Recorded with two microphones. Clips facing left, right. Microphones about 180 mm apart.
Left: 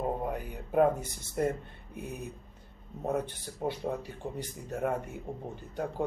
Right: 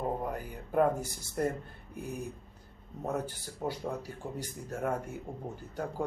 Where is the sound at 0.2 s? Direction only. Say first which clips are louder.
Left 2 dB; centre (ahead or behind).